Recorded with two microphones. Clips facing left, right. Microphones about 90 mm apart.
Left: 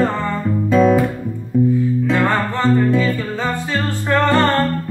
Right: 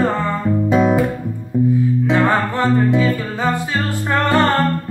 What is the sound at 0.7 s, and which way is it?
Guitar, 15° right (ahead or behind).